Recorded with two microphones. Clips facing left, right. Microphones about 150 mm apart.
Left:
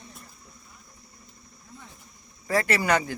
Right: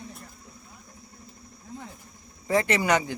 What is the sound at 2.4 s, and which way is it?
Speech, 20° right (ahead or behind).